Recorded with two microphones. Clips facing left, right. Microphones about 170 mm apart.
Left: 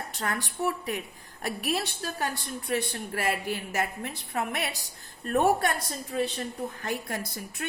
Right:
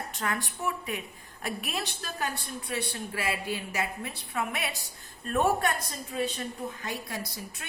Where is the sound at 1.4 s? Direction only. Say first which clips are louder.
Left 4 dB; 40° left (ahead or behind).